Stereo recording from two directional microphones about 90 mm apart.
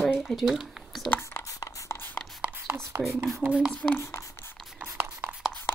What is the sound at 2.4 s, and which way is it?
Whispering, 25° right (ahead or behind).